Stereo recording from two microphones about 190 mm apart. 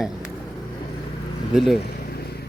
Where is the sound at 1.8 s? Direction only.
55° left (ahead or behind).